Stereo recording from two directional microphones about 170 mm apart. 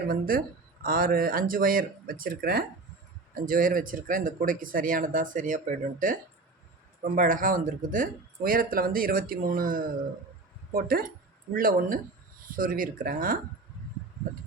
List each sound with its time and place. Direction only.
0.1 s speech: 55° right (ahead or behind)